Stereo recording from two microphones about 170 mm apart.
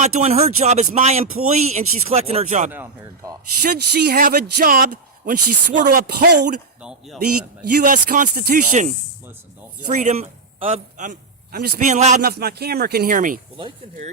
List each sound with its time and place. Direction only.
0.0 s speech: 40° right (ahead or behind)
3.6 s a man's voice: 65° right (ahead or behind)
6.1 s speech: 65° right (ahead or behind)
7.7 s a man's voice: 50° right (ahead or behind)
12.2 s a man's voice: 65° right (ahead or behind)
13.6 s speech: 30° right (ahead or behind)